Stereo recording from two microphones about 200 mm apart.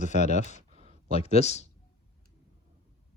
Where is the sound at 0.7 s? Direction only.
35° right (ahead or behind).